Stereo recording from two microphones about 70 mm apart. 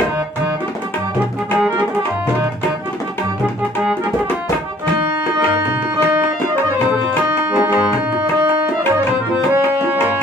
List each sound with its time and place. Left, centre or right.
7.5 s music: right
9.5 s music: right